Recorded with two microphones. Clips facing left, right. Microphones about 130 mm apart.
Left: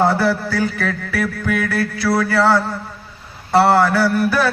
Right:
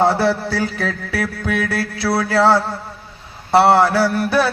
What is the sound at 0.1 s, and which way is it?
Music, 25° right (ahead or behind).